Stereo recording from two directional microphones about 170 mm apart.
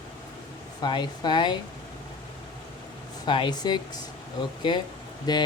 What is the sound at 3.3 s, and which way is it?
Speech, 25° left (ahead or behind).